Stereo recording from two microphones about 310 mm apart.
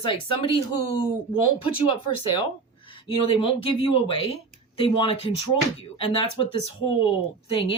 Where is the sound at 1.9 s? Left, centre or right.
Centre.